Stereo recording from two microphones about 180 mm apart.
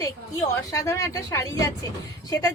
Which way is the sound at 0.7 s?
20° left (ahead or behind).